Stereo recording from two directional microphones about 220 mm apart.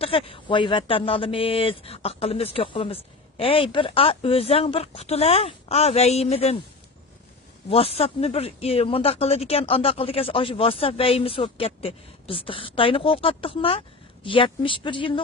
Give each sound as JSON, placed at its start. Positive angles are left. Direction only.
{"t": 0.0, "sound": "speech", "side_deg": 25}
{"t": 7.7, "sound": "speech", "side_deg": 25}